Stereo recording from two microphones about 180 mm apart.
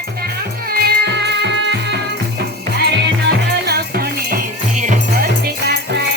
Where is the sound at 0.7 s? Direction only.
60° right (ahead or behind).